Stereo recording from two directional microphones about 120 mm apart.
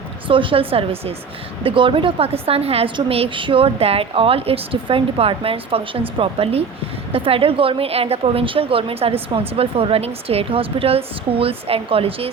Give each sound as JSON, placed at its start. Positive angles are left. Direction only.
{"t": 0.3, "sound": "a woman's voice", "side_deg": -45}